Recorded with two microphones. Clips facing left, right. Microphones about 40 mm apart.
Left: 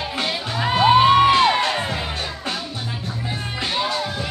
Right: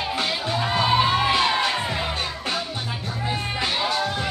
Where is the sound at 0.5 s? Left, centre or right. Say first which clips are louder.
Left 6 dB; left.